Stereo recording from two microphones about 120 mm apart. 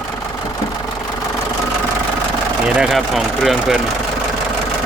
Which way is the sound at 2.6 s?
5° right (ahead or behind).